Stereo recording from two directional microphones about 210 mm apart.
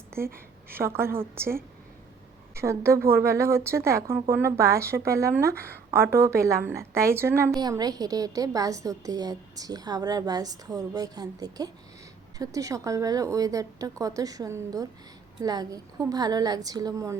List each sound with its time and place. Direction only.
0.7 s a woman's voice: 10° right (ahead or behind)
2.6 s a woman's voice: 15° right (ahead or behind)